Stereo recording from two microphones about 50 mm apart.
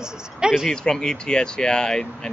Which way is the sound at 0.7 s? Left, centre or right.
Centre.